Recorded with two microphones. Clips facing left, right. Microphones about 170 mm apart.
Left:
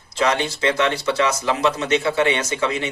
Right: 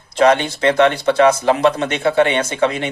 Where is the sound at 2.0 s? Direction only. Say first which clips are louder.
Right 8 dB; 30° right (ahead or behind).